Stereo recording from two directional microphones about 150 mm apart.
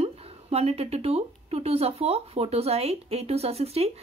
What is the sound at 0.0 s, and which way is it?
A woman's voice, 40° right (ahead or behind).